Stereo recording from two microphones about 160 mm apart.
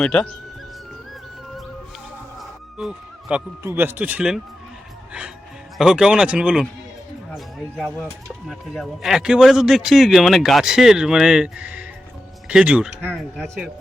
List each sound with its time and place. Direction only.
0.0 s speech: 5° left (ahead or behind)
2.7 s a man's voice: 5° right (ahead or behind)
5.7 s speech: 5° right (ahead or behind)
8.4 s a man's voice: centre (ahead or behind)